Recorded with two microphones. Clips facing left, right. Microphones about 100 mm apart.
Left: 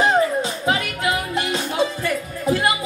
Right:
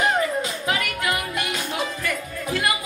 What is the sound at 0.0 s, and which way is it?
Music, 30° left (ahead or behind).